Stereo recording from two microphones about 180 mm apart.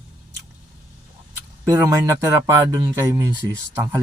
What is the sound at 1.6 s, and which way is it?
Speech, 15° right (ahead or behind).